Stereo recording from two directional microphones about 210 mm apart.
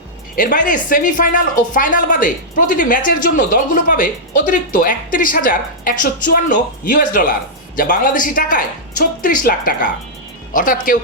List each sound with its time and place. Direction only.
0.3 s speech: 40° left (ahead or behind)